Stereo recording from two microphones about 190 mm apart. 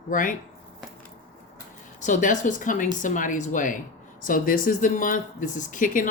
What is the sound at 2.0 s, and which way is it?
Speech, 40° left (ahead or behind).